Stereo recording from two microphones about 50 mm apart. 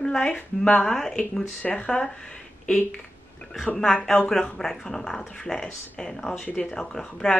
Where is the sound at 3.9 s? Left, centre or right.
Centre.